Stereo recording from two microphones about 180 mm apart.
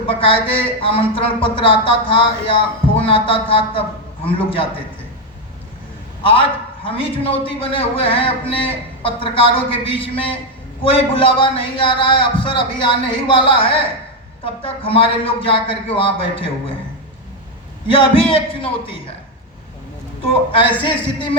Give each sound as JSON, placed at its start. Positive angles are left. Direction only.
{"t": 0.1, "sound": "speech", "side_deg": 30}
{"t": 6.2, "sound": "speech", "side_deg": 30}
{"t": 17.8, "sound": "speech", "side_deg": 30}
{"t": 20.5, "sound": "speech", "side_deg": 30}